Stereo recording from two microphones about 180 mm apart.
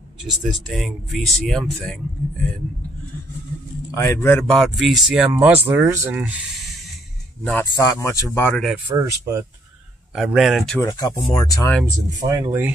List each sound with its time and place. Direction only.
0.2 s speech: centre (ahead or behind)
3.9 s speech: 15° left (ahead or behind)
4.5 s speech: centre (ahead or behind)
7.7 s speech: 20° left (ahead or behind)
8.8 s speech: 15° right (ahead or behind)
10.1 s speech: 5° right (ahead or behind)
10.8 s speech: 20° left (ahead or behind)
12.3 s speech: 20° right (ahead or behind)